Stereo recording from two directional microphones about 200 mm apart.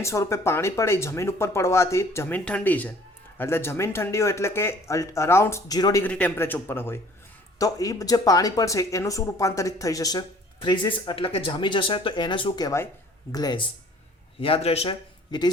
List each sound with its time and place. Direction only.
0.0 s speech: 15° left (ahead or behind)